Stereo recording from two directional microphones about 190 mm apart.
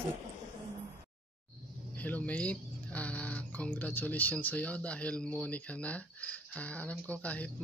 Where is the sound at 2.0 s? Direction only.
10° left (ahead or behind).